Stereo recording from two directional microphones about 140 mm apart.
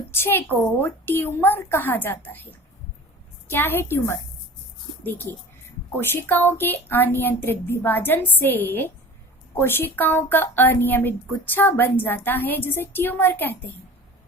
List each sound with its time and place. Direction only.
0.1 s speech: 15° left (ahead or behind)